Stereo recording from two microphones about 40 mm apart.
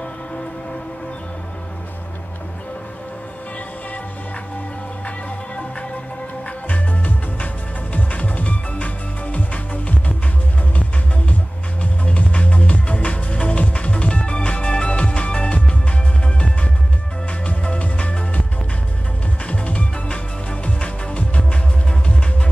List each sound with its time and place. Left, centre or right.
6.7 s music: left
11.8 s music: left
17.5 s music: left